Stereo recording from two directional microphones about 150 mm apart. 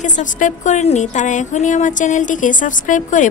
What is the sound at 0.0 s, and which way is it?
A woman's voice, 55° left (ahead or behind).